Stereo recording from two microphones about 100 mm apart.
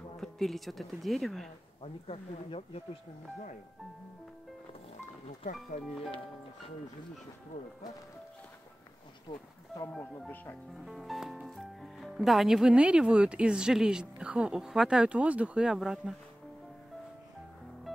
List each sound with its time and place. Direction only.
0.2 s a woman's voice: centre (ahead or behind)
1.8 s speech: 75° left (ahead or behind)
5.7 s speech: 75° left (ahead or behind)
9.3 s speech: 45° left (ahead or behind)
9.9 s speech: 15° left (ahead or behind)
10.9 s speech: centre (ahead or behind)
17.9 s music: centre (ahead or behind)